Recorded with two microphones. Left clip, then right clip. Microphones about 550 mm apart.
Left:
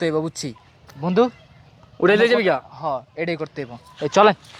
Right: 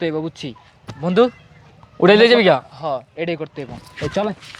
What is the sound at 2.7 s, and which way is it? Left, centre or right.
Speech, centre.